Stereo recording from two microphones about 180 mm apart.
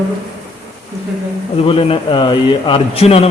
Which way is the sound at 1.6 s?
30° left (ahead or behind).